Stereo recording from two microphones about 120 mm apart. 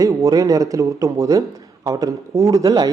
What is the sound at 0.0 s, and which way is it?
A man's voice, 30° right (ahead or behind).